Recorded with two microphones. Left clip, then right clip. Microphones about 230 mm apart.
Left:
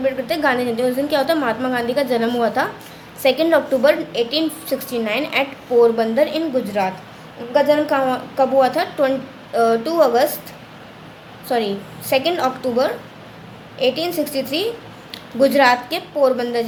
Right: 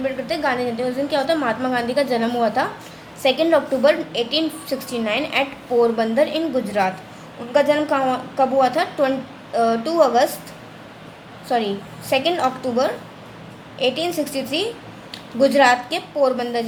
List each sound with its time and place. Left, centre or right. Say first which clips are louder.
0.0 s a woman's voice: left 3 dB; left
11.4 s a woman's voice: left 1 dB; centre